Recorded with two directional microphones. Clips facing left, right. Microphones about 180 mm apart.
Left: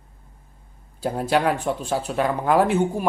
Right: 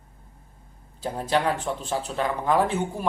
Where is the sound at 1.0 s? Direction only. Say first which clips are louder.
Left 3 dB; 10° left (ahead or behind).